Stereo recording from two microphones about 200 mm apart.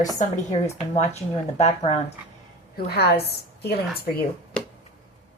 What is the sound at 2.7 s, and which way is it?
A woman's voice, 50° left (ahead or behind).